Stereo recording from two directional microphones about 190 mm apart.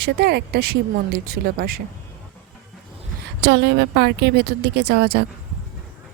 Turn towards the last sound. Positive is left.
turn(degrees=-60)  # may be behind; listen again after turning